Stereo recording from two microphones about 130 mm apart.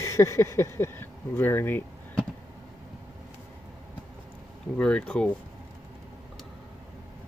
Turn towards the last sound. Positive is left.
turn(degrees=5)  # may be behind; listen again after turning